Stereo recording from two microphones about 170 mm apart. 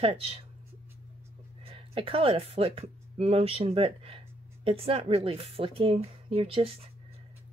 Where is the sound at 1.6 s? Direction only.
30° right (ahead or behind).